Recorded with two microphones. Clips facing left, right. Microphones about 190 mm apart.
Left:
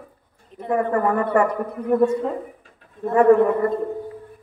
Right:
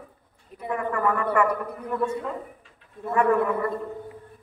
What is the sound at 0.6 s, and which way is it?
A man's voice, 35° left (ahead or behind).